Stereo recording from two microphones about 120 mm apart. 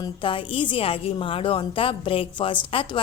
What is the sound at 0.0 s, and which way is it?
A woman's voice, 45° left (ahead or behind).